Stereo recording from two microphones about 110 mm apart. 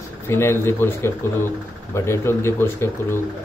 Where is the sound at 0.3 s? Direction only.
20° left (ahead or behind).